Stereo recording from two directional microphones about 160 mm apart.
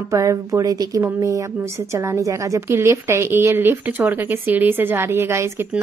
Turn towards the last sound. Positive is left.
turn(degrees=-15)  # may be behind; listen again after turning